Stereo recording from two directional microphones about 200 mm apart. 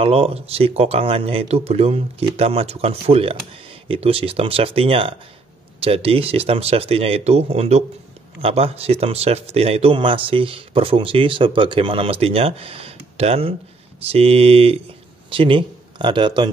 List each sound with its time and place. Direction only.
0.0 s a man's voice: 30° right (ahead or behind)